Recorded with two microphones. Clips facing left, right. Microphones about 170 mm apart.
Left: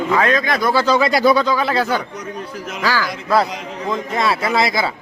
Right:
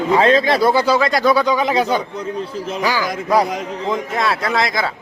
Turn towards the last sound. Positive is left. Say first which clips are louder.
# left 1 dB
turn(degrees=5)  # may be behind; listen again after turning